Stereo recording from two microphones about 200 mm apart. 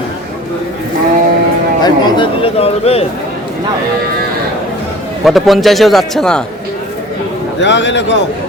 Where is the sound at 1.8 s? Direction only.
25° left (ahead or behind).